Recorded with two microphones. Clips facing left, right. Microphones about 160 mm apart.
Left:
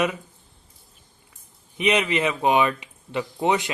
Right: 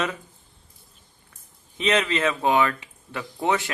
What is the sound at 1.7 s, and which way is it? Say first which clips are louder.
Speech: left 1 dB; 15° left (ahead or behind).